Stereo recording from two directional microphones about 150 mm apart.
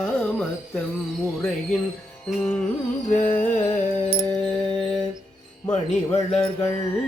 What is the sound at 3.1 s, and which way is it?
Music, 60° left (ahead or behind).